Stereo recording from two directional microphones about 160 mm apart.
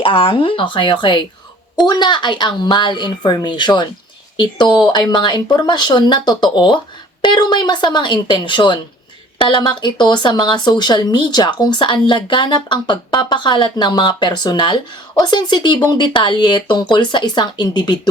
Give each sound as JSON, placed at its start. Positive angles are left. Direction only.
{"t": 0.0, "sound": "speech", "side_deg": 35}